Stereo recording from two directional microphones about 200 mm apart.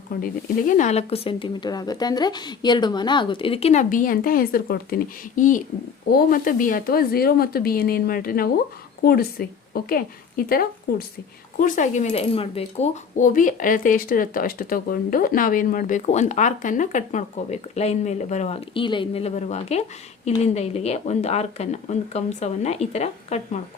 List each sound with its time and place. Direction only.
0.2 s a woman's voice: 40° left (ahead or behind)